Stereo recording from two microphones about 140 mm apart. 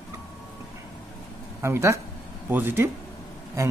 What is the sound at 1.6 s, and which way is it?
Speech, 20° right (ahead or behind).